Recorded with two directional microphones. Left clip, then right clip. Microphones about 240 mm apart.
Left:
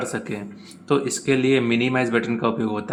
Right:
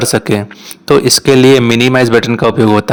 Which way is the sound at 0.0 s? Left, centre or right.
Right.